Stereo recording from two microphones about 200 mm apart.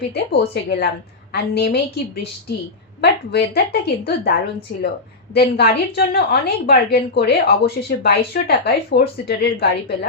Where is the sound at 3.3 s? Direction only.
55° left (ahead or behind).